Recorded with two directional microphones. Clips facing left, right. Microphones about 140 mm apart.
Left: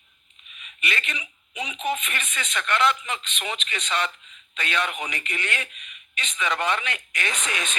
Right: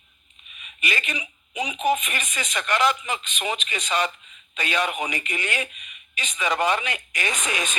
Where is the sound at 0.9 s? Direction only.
15° right (ahead or behind).